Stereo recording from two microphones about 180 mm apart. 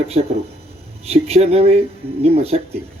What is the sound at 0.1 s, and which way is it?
Speech, 35° right (ahead or behind).